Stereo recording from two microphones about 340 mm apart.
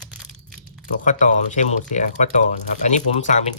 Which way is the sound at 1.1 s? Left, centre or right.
Left.